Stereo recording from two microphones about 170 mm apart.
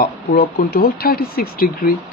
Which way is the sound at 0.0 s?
65° left (ahead or behind).